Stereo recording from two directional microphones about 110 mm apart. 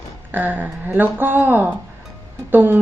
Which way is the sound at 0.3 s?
15° right (ahead or behind).